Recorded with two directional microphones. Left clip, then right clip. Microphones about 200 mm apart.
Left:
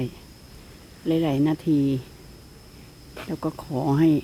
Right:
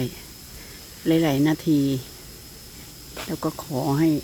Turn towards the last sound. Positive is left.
turn(degrees=5)  # may be behind; listen again after turning